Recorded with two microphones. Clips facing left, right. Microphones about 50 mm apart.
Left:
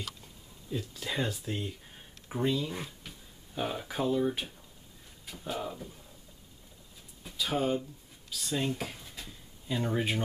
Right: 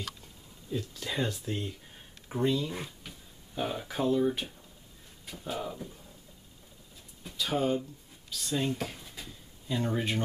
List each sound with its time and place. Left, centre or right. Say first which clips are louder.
0.7 s speech: right 1 dB; centre
7.2 s speech: right 1 dB; centre